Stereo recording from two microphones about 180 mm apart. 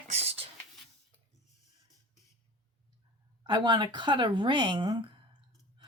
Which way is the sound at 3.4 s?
25° right (ahead or behind).